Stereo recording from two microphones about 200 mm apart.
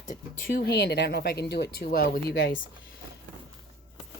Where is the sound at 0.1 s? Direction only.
45° left (ahead or behind).